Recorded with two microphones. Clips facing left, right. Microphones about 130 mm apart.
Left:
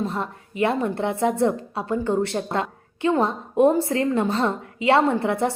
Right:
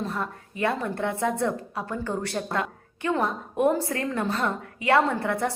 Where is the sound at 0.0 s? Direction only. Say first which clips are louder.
Left 3 dB; 25° left (ahead or behind).